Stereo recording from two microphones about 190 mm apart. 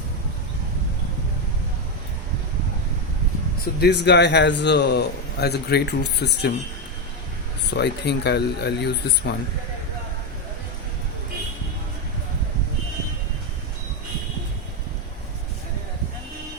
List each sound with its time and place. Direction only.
3.6 s a man's voice: 60° left (ahead or behind)
7.7 s a man's voice: 65° left (ahead or behind)